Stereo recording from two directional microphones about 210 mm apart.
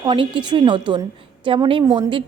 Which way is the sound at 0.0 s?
20° right (ahead or behind).